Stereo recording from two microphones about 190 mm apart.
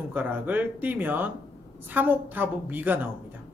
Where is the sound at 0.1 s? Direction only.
10° right (ahead or behind).